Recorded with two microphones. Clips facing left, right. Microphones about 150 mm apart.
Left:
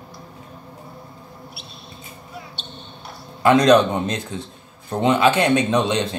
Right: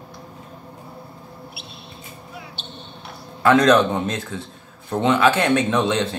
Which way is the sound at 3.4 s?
15° left (ahead or behind).